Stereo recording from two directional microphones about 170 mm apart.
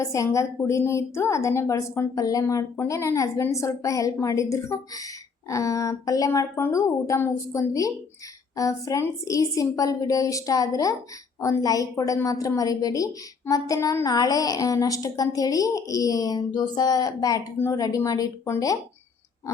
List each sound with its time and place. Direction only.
0.0 s a woman's voice: 15° left (ahead or behind)